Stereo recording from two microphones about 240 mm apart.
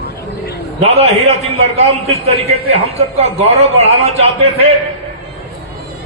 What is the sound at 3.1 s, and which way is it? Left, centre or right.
A man's voice, right.